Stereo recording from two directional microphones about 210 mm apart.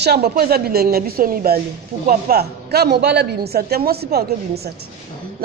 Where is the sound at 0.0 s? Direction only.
50° right (ahead or behind).